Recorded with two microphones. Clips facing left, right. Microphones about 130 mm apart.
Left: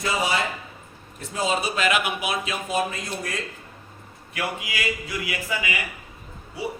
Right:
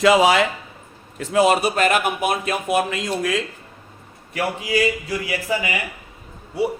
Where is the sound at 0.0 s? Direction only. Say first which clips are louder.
Right 10 dB; 85° right.